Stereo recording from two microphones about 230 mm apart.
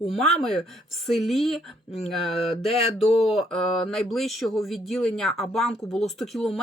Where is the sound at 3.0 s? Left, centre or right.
Left.